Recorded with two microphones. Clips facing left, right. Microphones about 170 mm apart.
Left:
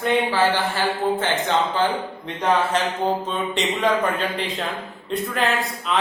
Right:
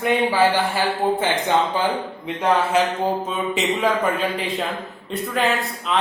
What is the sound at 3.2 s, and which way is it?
A man's voice, 5° right (ahead or behind).